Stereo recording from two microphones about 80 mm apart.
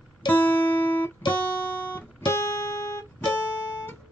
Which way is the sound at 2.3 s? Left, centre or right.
Left.